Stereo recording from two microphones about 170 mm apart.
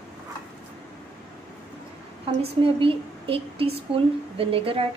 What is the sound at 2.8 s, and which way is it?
Speech, 35° right (ahead or behind).